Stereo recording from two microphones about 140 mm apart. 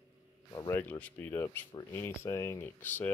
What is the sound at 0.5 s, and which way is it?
Speech, 25° left (ahead or behind).